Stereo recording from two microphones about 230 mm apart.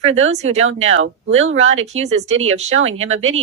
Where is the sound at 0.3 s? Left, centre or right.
Right.